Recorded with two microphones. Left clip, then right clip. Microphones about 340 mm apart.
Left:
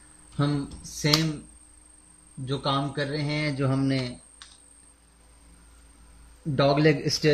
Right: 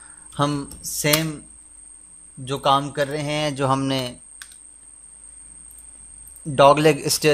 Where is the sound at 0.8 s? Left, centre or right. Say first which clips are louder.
Right 4 dB; right.